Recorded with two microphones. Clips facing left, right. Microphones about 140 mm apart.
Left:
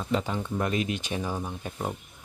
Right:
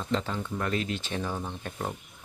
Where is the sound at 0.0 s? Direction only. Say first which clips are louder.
Left 2 dB; 10° left (ahead or behind).